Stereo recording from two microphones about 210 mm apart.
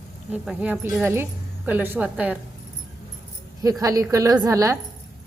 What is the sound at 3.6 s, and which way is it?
Speech, 15° right (ahead or behind).